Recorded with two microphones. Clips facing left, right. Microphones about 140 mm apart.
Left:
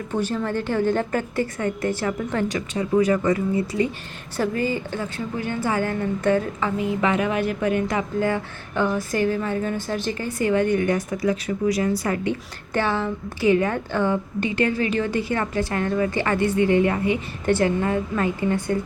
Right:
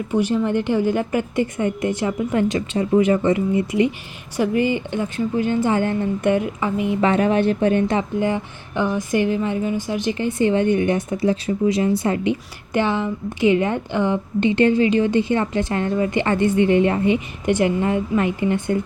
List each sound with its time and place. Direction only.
0.1 s a woman's voice: 10° right (ahead or behind)
7.0 s a woman's voice: 30° right (ahead or behind)